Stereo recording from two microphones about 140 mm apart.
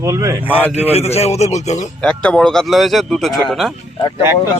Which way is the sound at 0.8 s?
45° left (ahead or behind).